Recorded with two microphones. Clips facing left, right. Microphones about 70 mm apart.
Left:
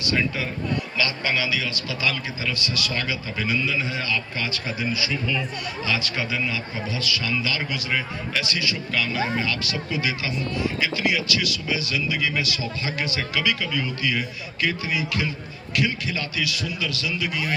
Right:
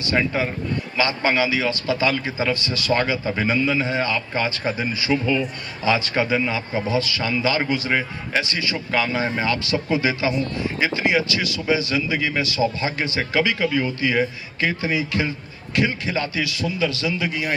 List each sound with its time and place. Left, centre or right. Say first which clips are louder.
0.0 s a man's voice: right 4 dB; right